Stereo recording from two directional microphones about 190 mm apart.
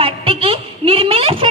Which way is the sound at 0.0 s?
30° right (ahead or behind).